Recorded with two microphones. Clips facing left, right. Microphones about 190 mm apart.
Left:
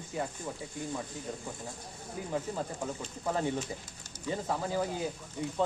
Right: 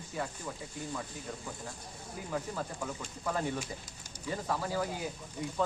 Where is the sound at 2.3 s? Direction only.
25° left (ahead or behind).